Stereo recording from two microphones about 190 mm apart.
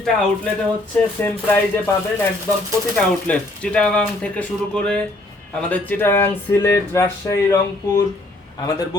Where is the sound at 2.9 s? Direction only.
5° left (ahead or behind).